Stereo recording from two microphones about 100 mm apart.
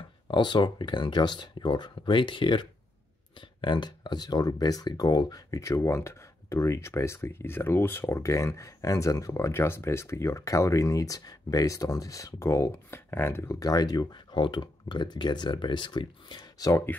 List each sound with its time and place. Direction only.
0.3 s speech: 50° left (ahead or behind); by 13.6 s 25° left (ahead or behind)
13.6 s speech: 40° left (ahead or behind)
16.5 s speech: 35° left (ahead or behind)